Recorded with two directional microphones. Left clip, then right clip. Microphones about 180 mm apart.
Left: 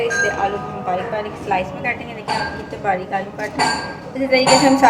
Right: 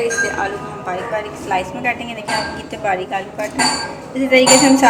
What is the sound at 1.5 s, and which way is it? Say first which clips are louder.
A woman's voice: right 2 dB; 5° right (ahead or behind).